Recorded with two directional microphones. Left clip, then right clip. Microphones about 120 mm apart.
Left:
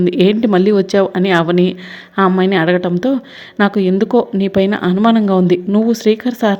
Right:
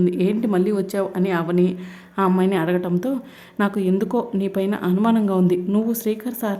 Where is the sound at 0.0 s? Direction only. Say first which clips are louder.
Left 8 dB; 35° left (ahead or behind).